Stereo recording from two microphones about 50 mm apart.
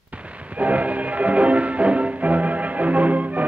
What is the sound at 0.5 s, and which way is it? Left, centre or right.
Music, right.